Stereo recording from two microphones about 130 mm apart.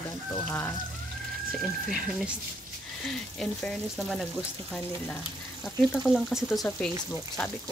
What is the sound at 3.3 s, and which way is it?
Speech, 5° left (ahead or behind).